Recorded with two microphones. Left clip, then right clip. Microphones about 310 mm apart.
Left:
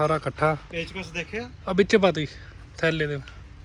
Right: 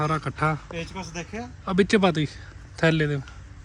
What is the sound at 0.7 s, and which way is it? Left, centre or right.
Speech, right.